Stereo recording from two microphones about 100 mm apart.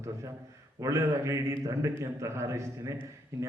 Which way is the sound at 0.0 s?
30° right (ahead or behind).